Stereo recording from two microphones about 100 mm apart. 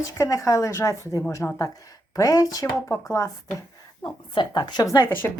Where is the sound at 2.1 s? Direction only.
35° left (ahead or behind).